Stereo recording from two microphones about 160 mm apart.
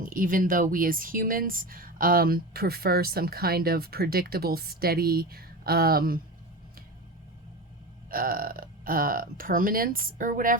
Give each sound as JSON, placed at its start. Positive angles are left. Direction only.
{"t": 0.0, "sound": "speech", "side_deg": -60}
{"t": 8.1, "sound": "speech", "side_deg": -65}